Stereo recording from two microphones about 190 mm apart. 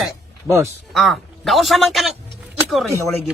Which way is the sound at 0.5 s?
15° right (ahead or behind).